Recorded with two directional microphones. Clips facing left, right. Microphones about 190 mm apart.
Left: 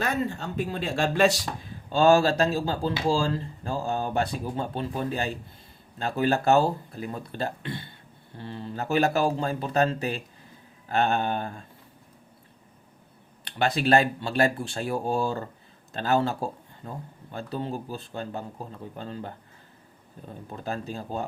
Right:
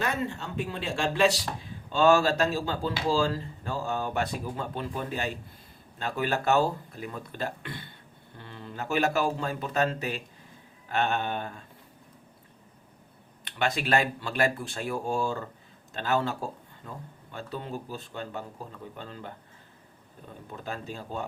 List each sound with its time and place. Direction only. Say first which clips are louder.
0.0 s speech: left 3 dB; 40° left (ahead or behind)
13.4 s speech: left 4 dB; 35° left (ahead or behind)
20.7 s speech: left 4 dB; 35° left (ahead or behind)